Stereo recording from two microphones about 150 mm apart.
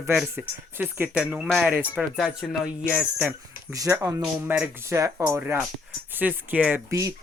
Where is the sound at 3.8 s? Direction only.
20° right (ahead or behind).